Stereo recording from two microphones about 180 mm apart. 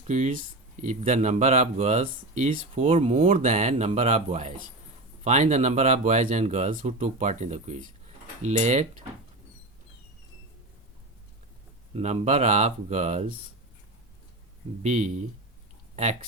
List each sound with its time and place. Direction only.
0.1 s speech: 45° right (ahead or behind)
2.9 s speech: 35° right (ahead or behind)
11.9 s speech: 35° right (ahead or behind)
14.8 s speech: 40° right (ahead or behind)